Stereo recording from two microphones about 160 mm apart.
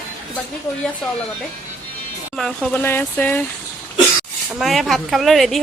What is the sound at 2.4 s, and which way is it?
Speech, 5° left (ahead or behind).